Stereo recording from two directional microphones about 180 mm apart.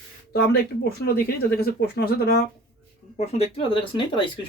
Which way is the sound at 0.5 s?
60° left (ahead or behind).